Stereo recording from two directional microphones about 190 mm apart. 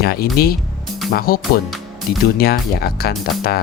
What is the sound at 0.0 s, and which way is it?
Speech, 55° left (ahead or behind).